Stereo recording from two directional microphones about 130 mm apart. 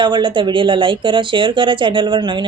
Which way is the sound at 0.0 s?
40° right (ahead or behind).